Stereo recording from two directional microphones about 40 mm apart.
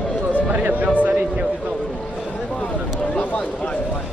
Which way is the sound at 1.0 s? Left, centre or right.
Right.